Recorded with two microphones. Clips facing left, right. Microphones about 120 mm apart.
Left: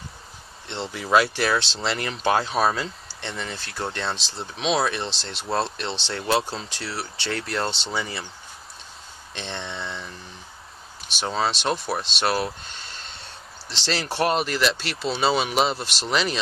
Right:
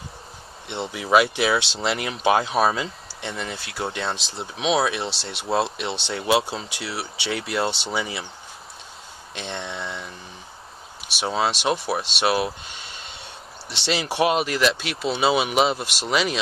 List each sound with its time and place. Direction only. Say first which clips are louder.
0.7 s speech: right 2 dB; 10° right (ahead or behind)
9.3 s speech: right 1 dB; 5° right (ahead or behind)